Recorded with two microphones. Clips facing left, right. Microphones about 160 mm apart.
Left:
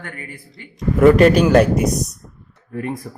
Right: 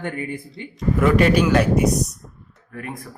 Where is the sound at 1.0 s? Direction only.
40° left (ahead or behind).